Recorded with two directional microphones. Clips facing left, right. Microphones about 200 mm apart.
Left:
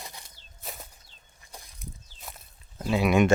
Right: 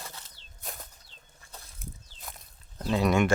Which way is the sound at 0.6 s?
Centre (ahead or behind).